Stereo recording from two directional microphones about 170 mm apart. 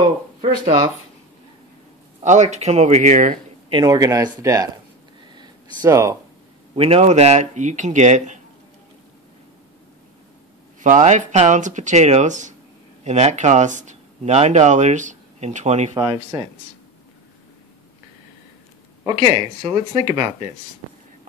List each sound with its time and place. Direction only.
2.2 s speech: 45° right (ahead or behind)
3.7 s speech: 20° right (ahead or behind)
5.8 s speech: 15° right (ahead or behind)
6.7 s speech: 35° right (ahead or behind)
10.8 s speech: 45° right (ahead or behind)
15.9 s speech: 25° right (ahead or behind)
19.0 s speech: 25° right (ahead or behind)